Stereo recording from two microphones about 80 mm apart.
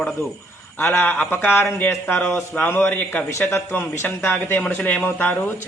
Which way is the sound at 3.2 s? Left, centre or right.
Left.